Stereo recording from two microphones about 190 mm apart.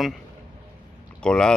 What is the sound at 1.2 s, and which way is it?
Speech, 5° left (ahead or behind).